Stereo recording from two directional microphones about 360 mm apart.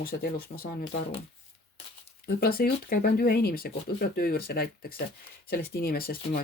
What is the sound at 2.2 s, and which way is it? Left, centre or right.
Speech, left.